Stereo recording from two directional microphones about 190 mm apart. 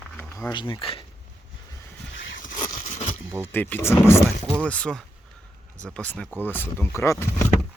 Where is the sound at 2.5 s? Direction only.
20° left (ahead or behind).